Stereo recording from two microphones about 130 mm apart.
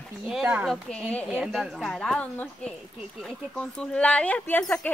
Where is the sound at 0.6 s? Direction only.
5° left (ahead or behind).